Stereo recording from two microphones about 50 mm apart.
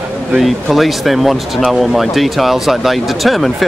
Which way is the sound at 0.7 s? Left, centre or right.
Centre.